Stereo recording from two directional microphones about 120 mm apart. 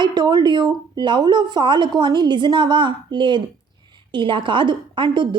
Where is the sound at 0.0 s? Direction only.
35° right (ahead or behind).